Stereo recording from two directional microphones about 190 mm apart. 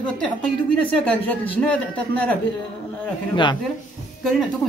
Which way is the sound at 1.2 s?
10° left (ahead or behind).